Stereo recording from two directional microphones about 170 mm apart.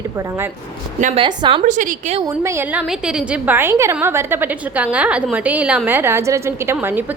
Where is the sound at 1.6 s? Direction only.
45° right (ahead or behind).